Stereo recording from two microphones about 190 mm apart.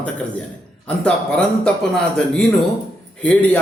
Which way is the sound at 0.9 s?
5° left (ahead or behind).